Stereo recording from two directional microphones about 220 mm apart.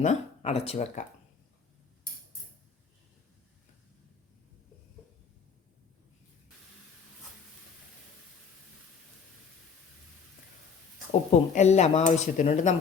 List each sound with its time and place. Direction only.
0.0 s speech: 30° left (ahead or behind)
11.3 s speech: 30° left (ahead or behind)